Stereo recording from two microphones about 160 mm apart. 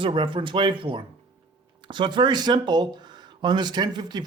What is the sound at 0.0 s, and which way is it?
Speech, 30° right (ahead or behind).